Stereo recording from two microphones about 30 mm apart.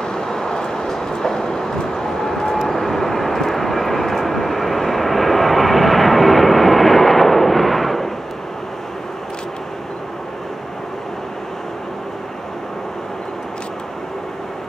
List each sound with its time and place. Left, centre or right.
0.0 s vehicle: left